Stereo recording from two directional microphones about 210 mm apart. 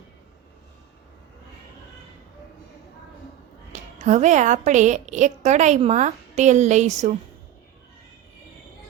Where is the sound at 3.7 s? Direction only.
35° right (ahead or behind).